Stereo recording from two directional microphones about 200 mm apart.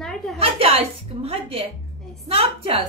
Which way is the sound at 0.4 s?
30° right (ahead or behind).